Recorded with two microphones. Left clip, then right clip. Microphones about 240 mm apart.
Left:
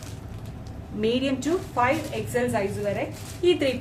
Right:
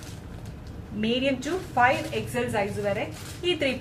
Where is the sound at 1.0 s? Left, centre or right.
Centre.